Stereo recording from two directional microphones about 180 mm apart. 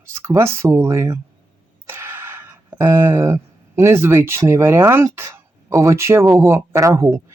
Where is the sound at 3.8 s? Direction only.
15° right (ahead or behind).